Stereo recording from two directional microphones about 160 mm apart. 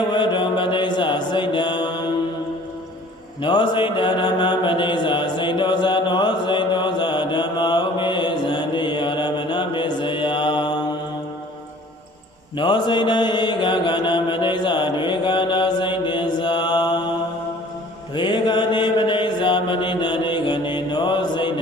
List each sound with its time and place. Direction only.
0.1 s mantra: 30° left (ahead or behind)
3.4 s mantra: 30° left (ahead or behind)
12.5 s mantra: 30° left (ahead or behind)
18.1 s mantra: 30° left (ahead or behind)